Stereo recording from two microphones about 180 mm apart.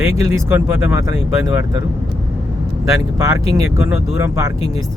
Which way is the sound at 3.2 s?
20° right (ahead or behind).